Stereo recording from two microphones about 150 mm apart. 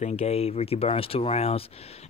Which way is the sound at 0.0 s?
40° left (ahead or behind).